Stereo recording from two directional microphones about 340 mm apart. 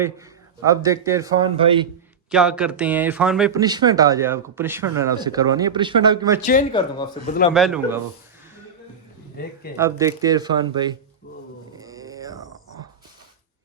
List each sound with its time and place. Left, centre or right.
0.6 s speech: centre
2.3 s speech: centre
6.4 s speech: left
7.5 s a man's voice: centre
9.4 s speech: left
9.7 s speech: centre
11.8 s a sound: centre